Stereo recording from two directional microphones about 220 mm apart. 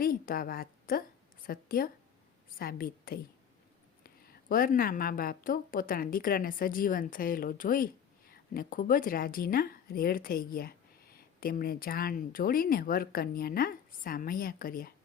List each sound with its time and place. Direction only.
0.0 s a woman's voice: 40° left (ahead or behind)